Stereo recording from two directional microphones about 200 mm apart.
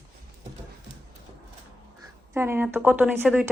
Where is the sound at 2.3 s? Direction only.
10° right (ahead or behind).